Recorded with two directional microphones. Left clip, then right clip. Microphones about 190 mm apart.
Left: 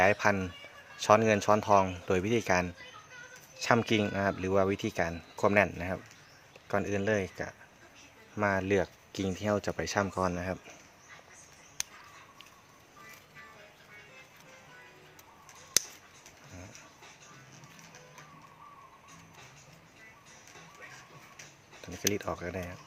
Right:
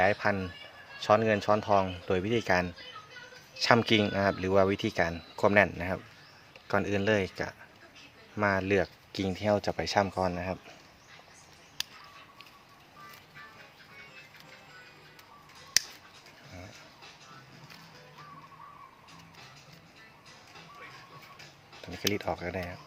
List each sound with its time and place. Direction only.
0.0 s speech: 15° left (ahead or behind)
22.1 s speech: 5° left (ahead or behind)